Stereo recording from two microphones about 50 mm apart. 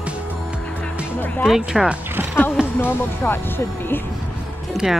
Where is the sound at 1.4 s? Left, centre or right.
Centre.